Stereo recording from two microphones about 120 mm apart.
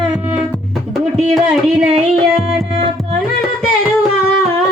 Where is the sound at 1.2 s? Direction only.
5° right (ahead or behind).